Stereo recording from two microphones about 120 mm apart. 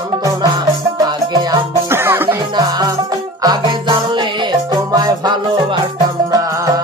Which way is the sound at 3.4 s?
35° right (ahead or behind).